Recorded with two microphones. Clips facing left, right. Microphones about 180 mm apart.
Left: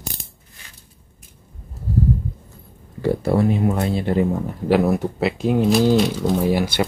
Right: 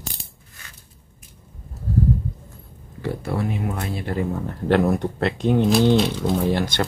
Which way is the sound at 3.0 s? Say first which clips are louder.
Left 7 dB; 35° left (ahead or behind).